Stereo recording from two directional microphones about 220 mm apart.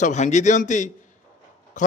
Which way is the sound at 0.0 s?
30° left (ahead or behind).